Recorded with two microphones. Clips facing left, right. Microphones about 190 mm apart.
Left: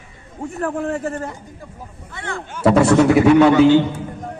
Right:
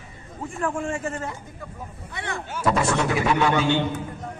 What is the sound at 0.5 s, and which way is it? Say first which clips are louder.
Speech: left 3 dB; 40° left (ahead or behind).